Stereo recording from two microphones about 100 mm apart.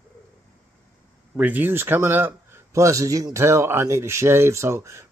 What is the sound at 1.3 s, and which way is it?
Speech, 15° right (ahead or behind).